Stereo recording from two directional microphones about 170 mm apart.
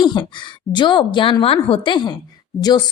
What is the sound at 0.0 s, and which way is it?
A woman's voice, 25° left (ahead or behind).